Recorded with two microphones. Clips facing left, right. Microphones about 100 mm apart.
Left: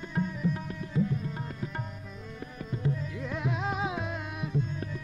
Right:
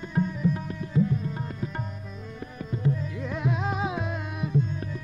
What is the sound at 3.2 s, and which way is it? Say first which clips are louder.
Music: right 3 dB; 25° right (ahead or behind).